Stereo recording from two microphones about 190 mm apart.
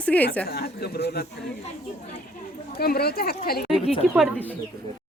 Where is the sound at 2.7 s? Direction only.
55° left (ahead or behind).